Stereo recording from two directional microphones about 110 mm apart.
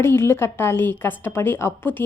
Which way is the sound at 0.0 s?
20° left (ahead or behind).